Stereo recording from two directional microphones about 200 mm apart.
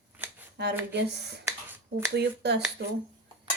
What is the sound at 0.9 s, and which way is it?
Speech, 55° right (ahead or behind).